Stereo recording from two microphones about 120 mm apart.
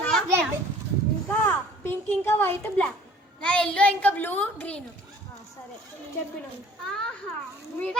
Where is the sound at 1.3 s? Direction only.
15° left (ahead or behind).